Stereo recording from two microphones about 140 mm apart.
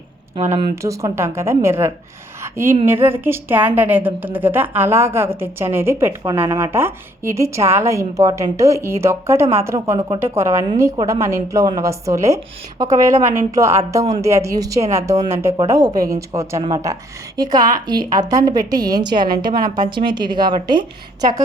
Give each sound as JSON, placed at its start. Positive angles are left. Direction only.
{"t": 0.8, "sound": "a woman's voice", "side_deg": -20}
{"t": 2.4, "sound": "a sound", "side_deg": -20}
{"t": 2.8, "sound": "a woman's voice", "side_deg": -15}